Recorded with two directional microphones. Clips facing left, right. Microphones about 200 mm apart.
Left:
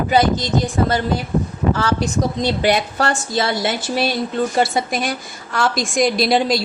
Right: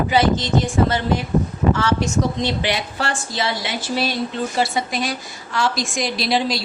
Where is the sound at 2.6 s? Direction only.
45° left (ahead or behind).